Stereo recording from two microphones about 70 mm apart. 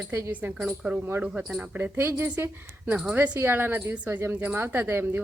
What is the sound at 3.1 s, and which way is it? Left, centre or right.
A woman's voice, right.